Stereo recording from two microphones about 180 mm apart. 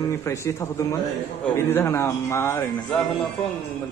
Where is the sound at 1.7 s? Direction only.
15° left (ahead or behind).